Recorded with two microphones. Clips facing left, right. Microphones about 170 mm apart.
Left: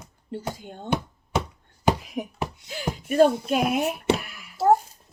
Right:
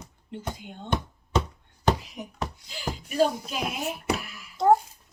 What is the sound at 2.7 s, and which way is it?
Speech, 55° left (ahead or behind).